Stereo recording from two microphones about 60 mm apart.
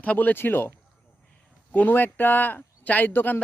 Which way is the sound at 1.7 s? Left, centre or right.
Left.